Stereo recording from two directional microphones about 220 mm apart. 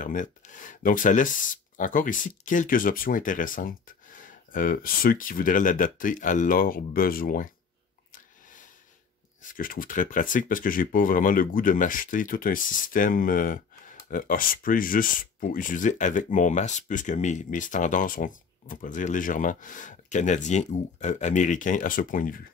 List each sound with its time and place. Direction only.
0.0 s speech: 35° left (ahead or behind)
9.4 s speech: 40° left (ahead or behind)